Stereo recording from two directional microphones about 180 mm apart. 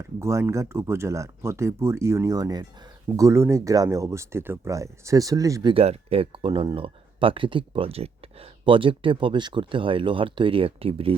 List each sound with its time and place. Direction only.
0.0 s speech: 15° right (ahead or behind)
5.7 s speech: 35° right (ahead or behind)